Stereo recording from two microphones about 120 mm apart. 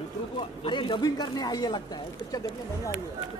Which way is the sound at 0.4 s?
40° left (ahead or behind).